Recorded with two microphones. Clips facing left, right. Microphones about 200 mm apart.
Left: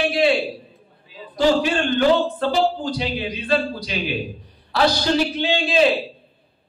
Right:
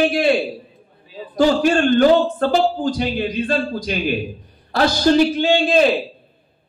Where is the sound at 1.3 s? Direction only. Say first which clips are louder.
Right 3 dB; 45° right (ahead or behind).